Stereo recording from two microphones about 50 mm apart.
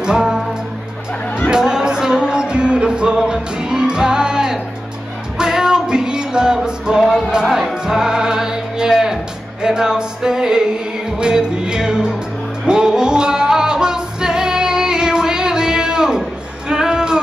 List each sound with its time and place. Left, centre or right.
0.0 s music: centre
1.5 s music: centre
7.0 s music: centre